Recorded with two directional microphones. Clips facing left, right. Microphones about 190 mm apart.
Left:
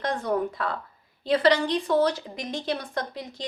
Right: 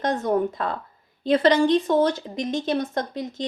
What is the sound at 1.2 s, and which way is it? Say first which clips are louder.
A woman's voice: right 3 dB; 25° right (ahead or behind).